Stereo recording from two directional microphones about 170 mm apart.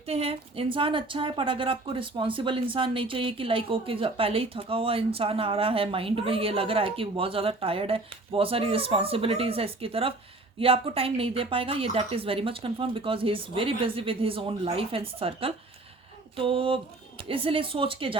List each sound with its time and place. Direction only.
0.0 s a woman's voice: 35° right (ahead or behind)